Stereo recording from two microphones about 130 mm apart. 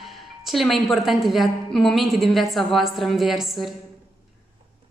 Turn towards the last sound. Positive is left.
turn(degrees=0)  # may be behind; listen again after turning